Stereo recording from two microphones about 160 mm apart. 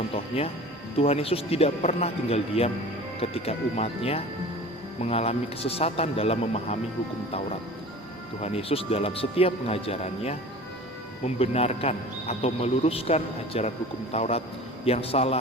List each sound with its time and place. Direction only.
0.3 s speech: 35° left (ahead or behind)
8.4 s speech: 40° left (ahead or behind)
11.3 s speech: 40° left (ahead or behind)